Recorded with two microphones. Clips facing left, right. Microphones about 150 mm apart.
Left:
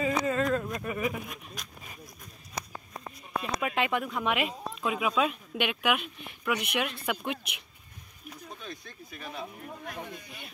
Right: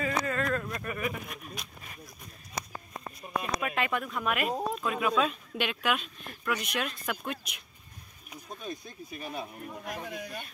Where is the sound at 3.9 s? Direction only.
5° left (ahead or behind).